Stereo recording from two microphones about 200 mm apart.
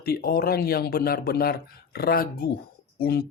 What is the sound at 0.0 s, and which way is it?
Speech, 50° left (ahead or behind).